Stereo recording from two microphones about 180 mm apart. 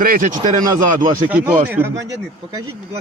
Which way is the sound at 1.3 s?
10° right (ahead or behind).